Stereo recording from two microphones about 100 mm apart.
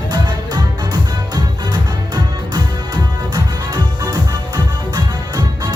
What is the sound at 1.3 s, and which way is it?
Music, 45° right (ahead or behind).